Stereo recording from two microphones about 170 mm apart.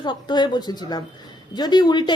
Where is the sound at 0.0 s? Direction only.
25° left (ahead or behind).